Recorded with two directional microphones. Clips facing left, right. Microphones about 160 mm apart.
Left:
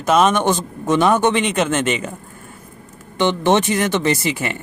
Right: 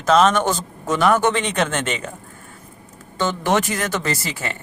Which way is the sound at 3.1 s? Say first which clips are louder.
Left 4 dB; 20° left (ahead or behind).